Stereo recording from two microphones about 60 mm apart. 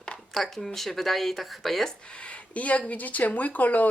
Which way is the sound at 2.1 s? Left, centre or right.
Centre.